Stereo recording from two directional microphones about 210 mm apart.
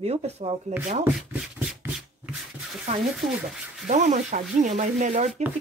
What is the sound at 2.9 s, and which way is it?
Speech, 30° right (ahead or behind).